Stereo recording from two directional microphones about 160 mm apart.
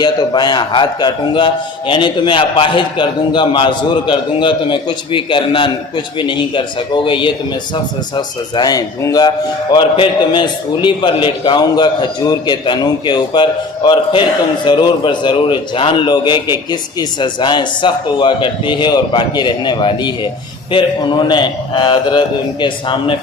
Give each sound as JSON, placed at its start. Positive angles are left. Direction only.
{"t": 0.0, "sound": "a man's voice", "side_deg": 25}